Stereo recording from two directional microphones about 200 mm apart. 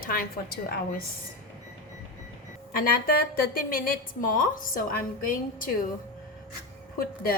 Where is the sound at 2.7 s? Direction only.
45° left (ahead or behind).